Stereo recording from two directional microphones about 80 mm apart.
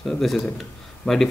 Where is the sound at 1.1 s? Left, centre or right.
Centre.